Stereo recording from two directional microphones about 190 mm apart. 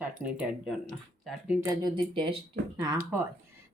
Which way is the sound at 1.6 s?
20° right (ahead or behind).